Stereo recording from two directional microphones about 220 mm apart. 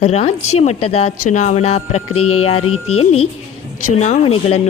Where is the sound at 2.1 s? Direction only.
85° left.